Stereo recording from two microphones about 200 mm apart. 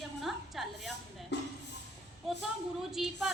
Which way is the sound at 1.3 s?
60° left (ahead or behind).